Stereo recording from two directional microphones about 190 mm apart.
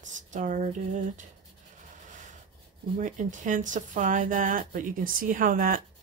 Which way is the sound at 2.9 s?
40° right (ahead or behind).